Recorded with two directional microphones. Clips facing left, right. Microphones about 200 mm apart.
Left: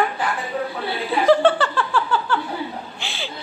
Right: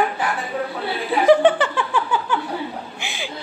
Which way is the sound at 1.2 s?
15° right (ahead or behind).